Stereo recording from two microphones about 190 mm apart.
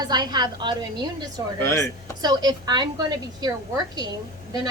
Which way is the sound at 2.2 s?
20° right (ahead or behind).